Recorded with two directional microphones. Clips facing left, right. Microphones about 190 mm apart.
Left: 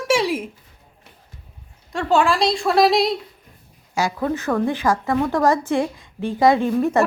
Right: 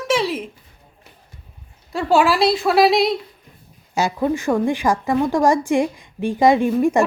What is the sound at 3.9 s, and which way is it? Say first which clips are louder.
A woman's voice: right 2 dB; 20° right (ahead or behind).